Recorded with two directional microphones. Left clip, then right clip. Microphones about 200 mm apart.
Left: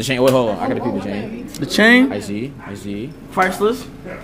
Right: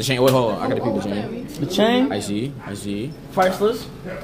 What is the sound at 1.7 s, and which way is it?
Speech, 25° left (ahead or behind).